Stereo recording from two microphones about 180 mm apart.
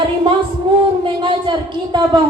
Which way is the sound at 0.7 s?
25° right (ahead or behind).